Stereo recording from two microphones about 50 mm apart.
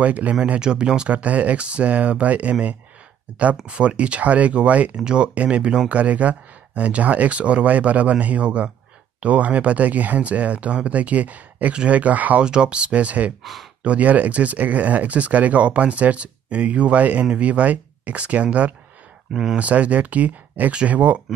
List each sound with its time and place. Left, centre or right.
0.0 s speech: right
3.6 s speech: right
12.4 s speech: centre
13.4 s speech: centre
13.8 s speech: right